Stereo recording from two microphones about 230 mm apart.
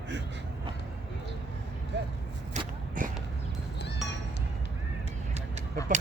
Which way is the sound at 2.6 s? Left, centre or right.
Right.